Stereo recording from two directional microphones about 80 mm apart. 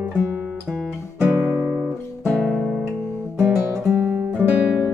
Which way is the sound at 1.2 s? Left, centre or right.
Right.